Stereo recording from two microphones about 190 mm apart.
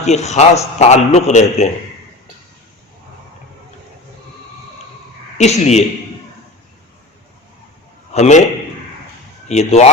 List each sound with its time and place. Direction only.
0.0 s a man's voice: 35° left (ahead or behind)
5.4 s a man's voice: 35° left (ahead or behind)
8.1 s a man's voice: 35° left (ahead or behind)
9.5 s a man's voice: 35° left (ahead or behind)